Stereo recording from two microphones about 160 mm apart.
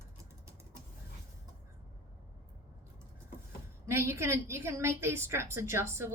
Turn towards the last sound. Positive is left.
turn(degrees=-15)  # may be behind; listen again after turning